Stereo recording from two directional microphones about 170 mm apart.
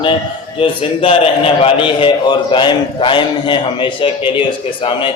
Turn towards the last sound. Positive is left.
turn(degrees=30)  # may be behind; listen again after turning